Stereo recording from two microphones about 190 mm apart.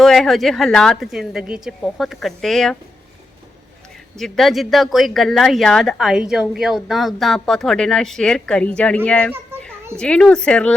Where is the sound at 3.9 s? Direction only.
Centre (ahead or behind).